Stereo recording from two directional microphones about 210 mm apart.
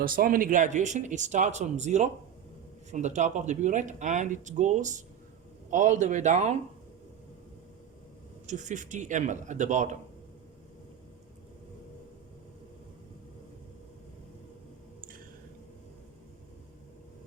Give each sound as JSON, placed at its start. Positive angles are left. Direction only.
{"t": 0.0, "sound": "speech", "side_deg": -40}
{"t": 8.4, "sound": "speech", "side_deg": -35}